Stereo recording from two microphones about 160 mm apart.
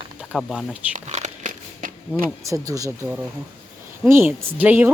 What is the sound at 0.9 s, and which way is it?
Crumpling, 45° right (ahead or behind).